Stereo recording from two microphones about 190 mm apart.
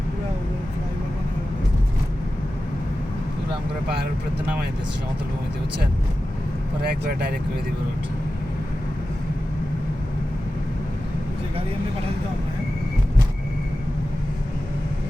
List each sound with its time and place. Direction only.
6.8 s speech: 55° right (ahead or behind)